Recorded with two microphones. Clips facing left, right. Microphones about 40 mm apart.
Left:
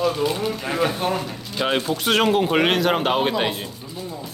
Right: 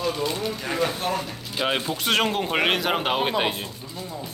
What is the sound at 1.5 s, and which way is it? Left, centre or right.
Speech, centre.